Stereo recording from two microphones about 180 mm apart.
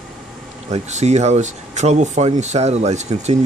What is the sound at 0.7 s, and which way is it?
Speech, 40° right (ahead or behind).